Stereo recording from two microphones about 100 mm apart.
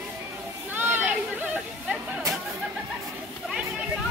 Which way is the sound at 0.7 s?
20° right (ahead or behind).